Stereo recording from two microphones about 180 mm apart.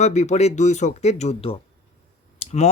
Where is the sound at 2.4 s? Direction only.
35° left (ahead or behind).